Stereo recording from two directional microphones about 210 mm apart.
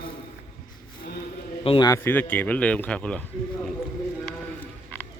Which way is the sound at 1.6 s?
25° left (ahead or behind).